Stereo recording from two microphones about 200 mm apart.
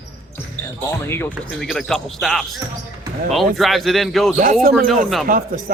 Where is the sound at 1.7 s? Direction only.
Centre (ahead or behind).